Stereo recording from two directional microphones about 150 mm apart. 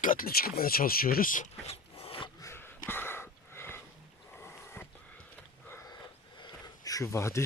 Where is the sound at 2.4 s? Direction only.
15° left (ahead or behind).